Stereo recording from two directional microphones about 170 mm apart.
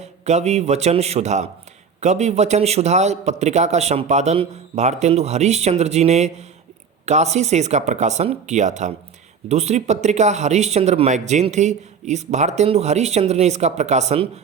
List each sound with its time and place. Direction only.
0.0 s speech: 40° right (ahead or behind)